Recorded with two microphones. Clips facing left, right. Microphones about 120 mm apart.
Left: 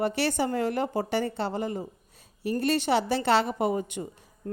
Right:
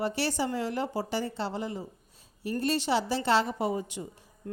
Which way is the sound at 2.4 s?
65° left (ahead or behind).